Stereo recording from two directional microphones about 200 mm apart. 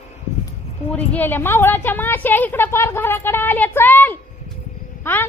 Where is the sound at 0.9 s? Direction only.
10° left (ahead or behind).